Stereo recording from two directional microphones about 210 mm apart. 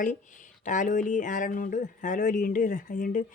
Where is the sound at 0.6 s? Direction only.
35° left (ahead or behind).